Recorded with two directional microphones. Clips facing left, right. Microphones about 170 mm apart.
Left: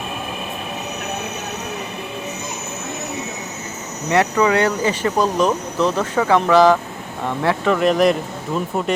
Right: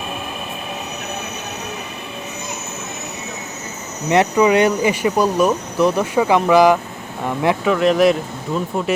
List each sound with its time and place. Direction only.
4.1 s speech: 20° right (ahead or behind); by 8.1 s centre (ahead or behind)